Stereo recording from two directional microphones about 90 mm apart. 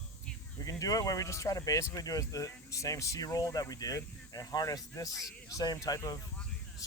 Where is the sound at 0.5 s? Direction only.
40° left (ahead or behind).